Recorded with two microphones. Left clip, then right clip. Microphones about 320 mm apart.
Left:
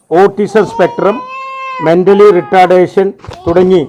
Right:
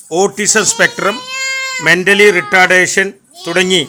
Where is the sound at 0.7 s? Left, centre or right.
Right.